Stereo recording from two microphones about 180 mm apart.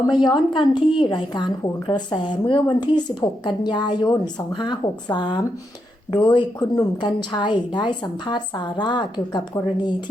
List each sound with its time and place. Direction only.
0.1 s a woman's voice: 25° left (ahead or behind)